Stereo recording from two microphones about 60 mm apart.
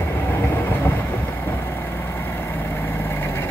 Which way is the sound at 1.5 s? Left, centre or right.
Left.